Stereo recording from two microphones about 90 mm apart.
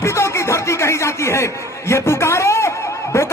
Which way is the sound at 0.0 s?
30° left (ahead or behind).